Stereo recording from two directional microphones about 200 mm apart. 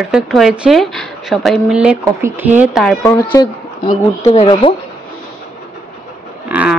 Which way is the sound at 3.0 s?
15° left (ahead or behind).